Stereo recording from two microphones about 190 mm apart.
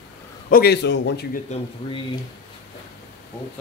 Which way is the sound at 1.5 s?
35° left (ahead or behind).